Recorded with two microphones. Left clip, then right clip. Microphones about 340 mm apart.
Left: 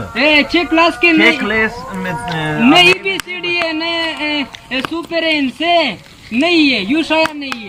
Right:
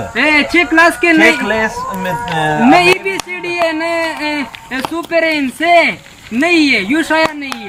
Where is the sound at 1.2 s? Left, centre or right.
Centre.